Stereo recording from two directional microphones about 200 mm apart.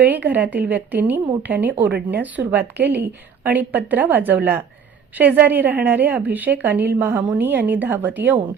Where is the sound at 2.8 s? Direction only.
55° right (ahead or behind).